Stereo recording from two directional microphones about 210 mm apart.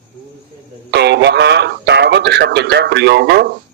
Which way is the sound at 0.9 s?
55° right (ahead or behind).